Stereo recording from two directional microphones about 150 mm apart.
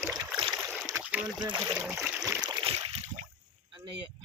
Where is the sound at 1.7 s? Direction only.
10° right (ahead or behind).